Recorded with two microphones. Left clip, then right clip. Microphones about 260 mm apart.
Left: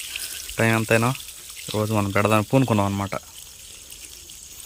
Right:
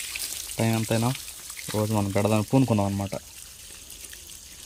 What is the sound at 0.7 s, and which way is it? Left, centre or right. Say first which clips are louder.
Speech: left 8 dB; left.